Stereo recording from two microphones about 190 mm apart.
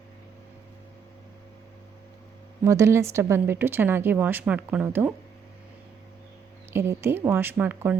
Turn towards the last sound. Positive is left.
turn(degrees=-10)  # may be behind; listen again after turning